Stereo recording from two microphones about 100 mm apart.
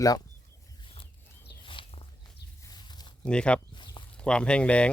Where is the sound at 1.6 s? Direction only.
65° left (ahead or behind).